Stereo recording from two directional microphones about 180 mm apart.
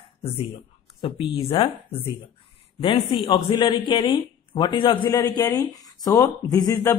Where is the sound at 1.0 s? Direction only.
30° left (ahead or behind).